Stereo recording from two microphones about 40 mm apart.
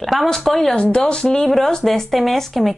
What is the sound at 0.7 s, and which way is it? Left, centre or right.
A woman's voice, left.